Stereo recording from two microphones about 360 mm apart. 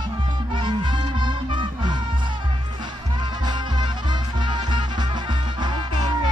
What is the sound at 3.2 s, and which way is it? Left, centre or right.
Music, centre.